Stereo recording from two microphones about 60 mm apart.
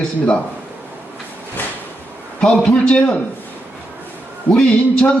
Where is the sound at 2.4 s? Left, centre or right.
Centre.